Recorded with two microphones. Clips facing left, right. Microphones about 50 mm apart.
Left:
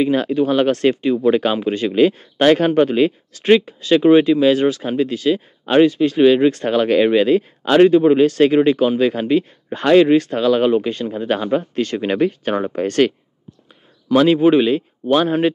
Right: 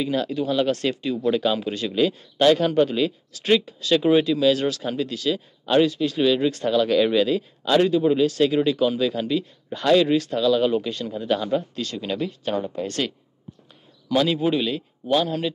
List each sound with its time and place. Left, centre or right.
0.0 s speech: left